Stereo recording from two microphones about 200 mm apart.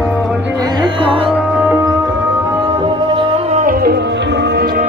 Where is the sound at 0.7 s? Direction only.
25° right (ahead or behind).